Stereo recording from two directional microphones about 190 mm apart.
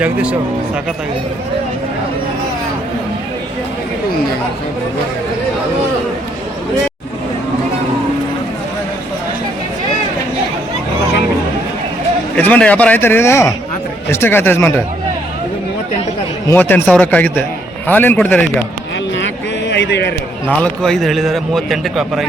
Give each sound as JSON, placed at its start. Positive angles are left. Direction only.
{"t": 0.0, "sound": "speech", "side_deg": -5}
{"t": 12.4, "sound": "speech", "side_deg": 5}
{"t": 16.5, "sound": "speech", "side_deg": 10}
{"t": 19.7, "sound": "a sound", "side_deg": 65}
{"t": 20.6, "sound": "a man's voice", "side_deg": 5}